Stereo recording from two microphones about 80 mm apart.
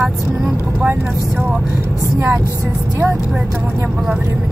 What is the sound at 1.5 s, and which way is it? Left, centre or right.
Speech, centre.